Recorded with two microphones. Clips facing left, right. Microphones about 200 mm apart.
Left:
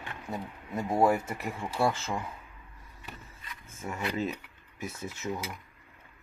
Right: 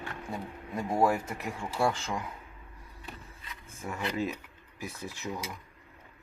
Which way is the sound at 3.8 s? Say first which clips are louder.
Even; centre (ahead or behind).